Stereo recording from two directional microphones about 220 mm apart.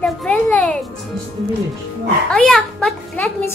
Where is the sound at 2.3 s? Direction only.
Centre (ahead or behind).